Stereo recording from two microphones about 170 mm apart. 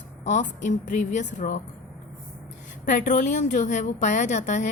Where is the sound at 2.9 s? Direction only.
50° left (ahead or behind).